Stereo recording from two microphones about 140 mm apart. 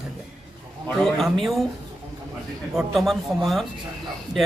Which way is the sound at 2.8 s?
Centre (ahead or behind).